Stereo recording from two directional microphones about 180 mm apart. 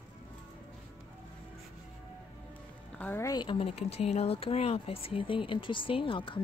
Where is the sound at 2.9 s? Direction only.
10° left (ahead or behind); by 6.4 s 30° left (ahead or behind).